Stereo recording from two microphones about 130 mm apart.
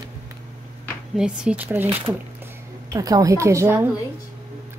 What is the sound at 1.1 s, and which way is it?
Speech, 5° right (ahead or behind).